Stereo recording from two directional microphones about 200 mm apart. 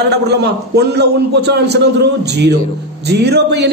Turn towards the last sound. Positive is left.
turn(degrees=-55)  # may be behind; listen again after turning